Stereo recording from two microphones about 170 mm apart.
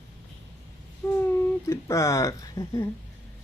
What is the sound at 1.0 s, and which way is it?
Speech, 20° left (ahead or behind).